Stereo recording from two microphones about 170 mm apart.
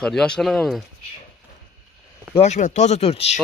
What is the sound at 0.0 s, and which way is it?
Speech, 5° left (ahead or behind).